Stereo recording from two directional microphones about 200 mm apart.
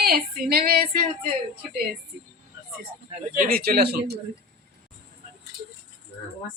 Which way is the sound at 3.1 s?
45° right (ahead or behind).